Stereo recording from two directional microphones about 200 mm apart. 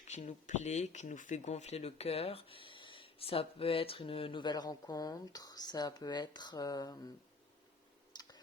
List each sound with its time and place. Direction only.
0.0 s speech: 35° left (ahead or behind); by 7.1 s 20° left (ahead or behind)
8.1 s clicking: 20° left (ahead or behind)